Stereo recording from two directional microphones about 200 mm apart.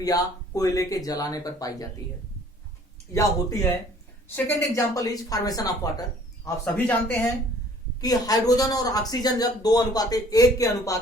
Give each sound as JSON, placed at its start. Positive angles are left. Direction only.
{"t": 0.0, "sound": "speech", "side_deg": 20}
{"t": 3.1, "sound": "speech", "side_deg": 15}